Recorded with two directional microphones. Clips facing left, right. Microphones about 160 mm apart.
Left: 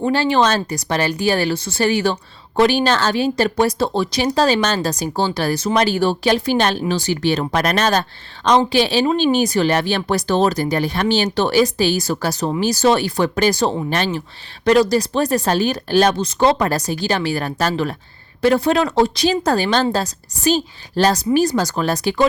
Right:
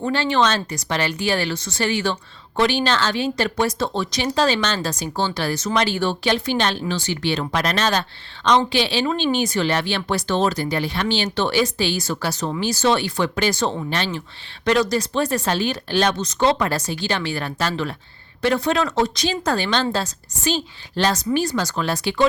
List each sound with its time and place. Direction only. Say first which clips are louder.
0.1 s speech: left 3 dB; 35° left (ahead or behind)